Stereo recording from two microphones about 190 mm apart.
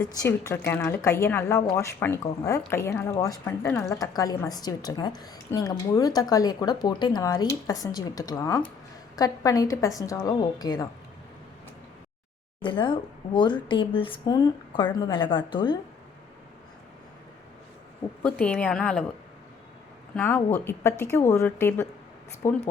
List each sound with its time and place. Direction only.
0.0 s a woman's voice: 20° left (ahead or behind)
12.6 s speech: 25° left (ahead or behind)
18.2 s a woman's voice: 5° left (ahead or behind)
20.1 s a woman's voice: 10° left (ahead or behind)